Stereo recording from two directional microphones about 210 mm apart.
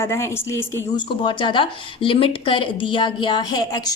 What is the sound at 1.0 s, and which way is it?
Speech, 25° left (ahead or behind).